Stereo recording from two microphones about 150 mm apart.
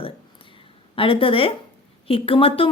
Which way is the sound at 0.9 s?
35° left (ahead or behind).